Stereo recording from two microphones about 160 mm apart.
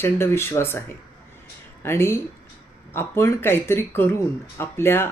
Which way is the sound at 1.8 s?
15° left (ahead or behind).